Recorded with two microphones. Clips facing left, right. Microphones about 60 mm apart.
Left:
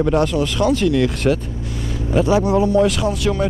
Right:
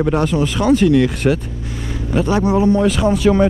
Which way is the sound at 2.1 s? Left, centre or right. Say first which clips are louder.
Left 1 dB; centre.